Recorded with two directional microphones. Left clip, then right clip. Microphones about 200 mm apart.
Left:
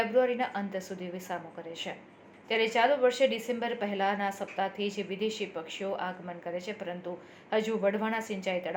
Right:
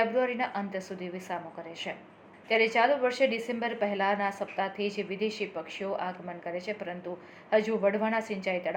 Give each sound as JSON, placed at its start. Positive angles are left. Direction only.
{"t": 0.0, "sound": "a woman's voice", "side_deg": 35}
{"t": 2.5, "sound": "a woman's voice", "side_deg": 35}